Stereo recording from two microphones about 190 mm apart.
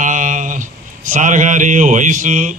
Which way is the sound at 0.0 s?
40° right (ahead or behind).